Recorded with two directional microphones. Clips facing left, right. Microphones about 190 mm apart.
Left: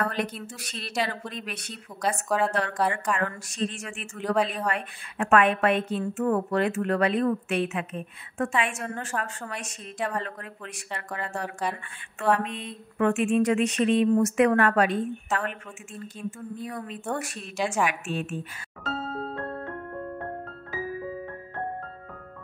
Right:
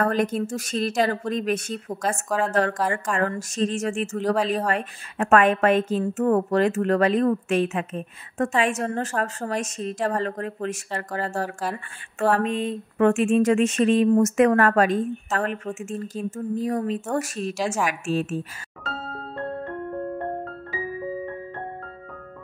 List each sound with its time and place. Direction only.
0.0 s a woman's voice: 45° right (ahead or behind)